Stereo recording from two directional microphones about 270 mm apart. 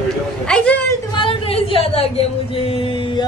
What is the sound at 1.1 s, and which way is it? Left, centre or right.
Speech, centre.